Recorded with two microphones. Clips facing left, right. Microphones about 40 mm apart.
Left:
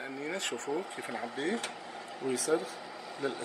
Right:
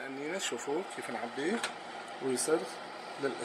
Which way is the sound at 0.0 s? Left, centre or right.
Left.